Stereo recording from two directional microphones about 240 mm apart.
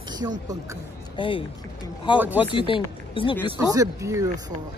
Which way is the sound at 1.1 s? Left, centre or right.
Left.